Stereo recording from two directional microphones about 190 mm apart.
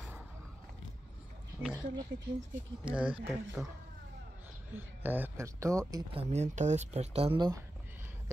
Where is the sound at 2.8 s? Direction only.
5° right (ahead or behind).